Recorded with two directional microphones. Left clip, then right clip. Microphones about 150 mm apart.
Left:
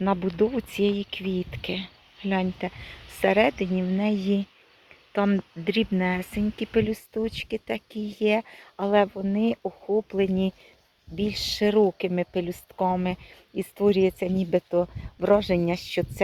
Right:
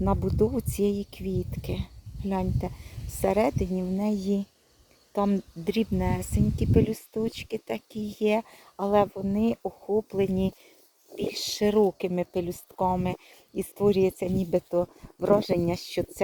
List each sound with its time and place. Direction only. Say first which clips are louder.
0.0 s speech: left 2 dB; 15° right (ahead or behind)
9.6 s speech: left 2 dB; 5° left (ahead or behind)
10.1 s speech: left 2 dB; 15° right (ahead or behind)